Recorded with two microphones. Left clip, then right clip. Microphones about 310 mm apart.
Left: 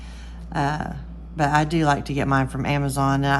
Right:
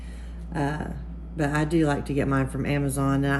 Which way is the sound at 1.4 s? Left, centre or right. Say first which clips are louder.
Left 4 dB; centre.